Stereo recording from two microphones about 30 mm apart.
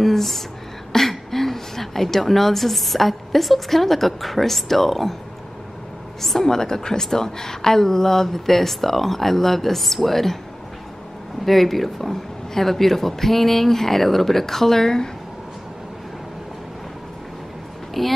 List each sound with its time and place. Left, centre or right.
0.0 s a sound: centre
0.9 s a woman's voice: centre
6.4 s speech: centre
11.4 s speech: centre
18.0 s speech: centre